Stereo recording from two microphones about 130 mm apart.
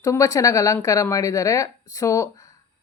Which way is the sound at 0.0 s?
25° left (ahead or behind).